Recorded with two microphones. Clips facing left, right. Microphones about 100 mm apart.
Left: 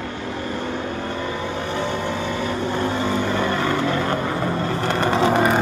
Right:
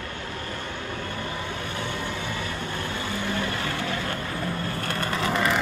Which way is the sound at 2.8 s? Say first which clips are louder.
Left 9 dB; 35° left (ahead or behind).